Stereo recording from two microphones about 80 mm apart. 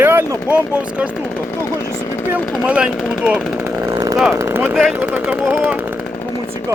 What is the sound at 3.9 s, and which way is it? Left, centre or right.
Chainsaw, right.